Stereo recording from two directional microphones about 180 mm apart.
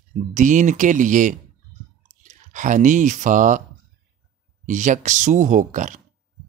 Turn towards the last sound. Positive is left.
turn(degrees=-45)  # may be behind; listen again after turning